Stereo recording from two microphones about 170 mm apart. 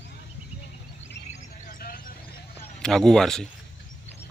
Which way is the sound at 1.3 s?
50° left (ahead or behind).